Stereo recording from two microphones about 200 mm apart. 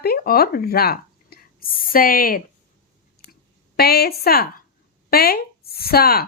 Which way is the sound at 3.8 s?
50° left (ahead or behind).